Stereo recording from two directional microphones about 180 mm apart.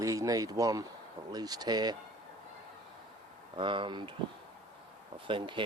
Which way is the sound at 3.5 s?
25° right (ahead or behind).